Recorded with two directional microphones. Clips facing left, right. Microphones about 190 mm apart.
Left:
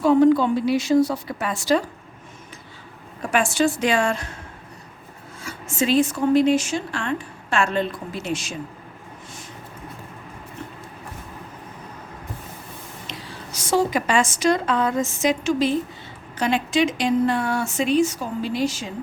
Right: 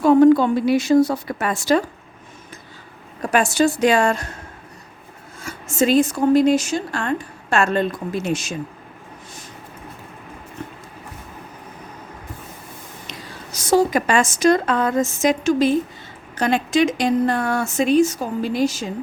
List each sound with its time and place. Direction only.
0.0 s a woman's voice: 50° right (ahead or behind)
3.2 s a woman's voice: 40° right (ahead or behind)
5.4 s a woman's voice: 45° right (ahead or behind)
13.1 s a woman's voice: 40° right (ahead or behind)